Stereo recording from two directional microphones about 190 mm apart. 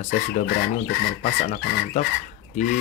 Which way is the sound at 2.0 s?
35° left (ahead or behind).